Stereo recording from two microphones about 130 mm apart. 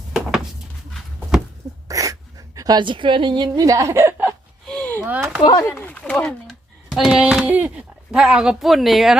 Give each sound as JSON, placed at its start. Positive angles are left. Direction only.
{"t": 0.1, "sound": "a sound", "side_deg": -5}
{"t": 1.9, "sound": "dog", "side_deg": -25}
{"t": 2.6, "sound": "a woman's voice", "side_deg": -30}
{"t": 3.5, "sound": "a woman's voice", "side_deg": -25}
{"t": 4.6, "sound": "a sound", "side_deg": 5}
{"t": 5.0, "sound": "speech", "side_deg": -10}
{"t": 5.4, "sound": "speech", "side_deg": 30}
{"t": 5.7, "sound": "a child's voice", "side_deg": 10}